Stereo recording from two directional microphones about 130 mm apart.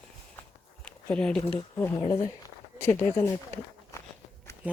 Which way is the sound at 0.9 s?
10° left (ahead or behind).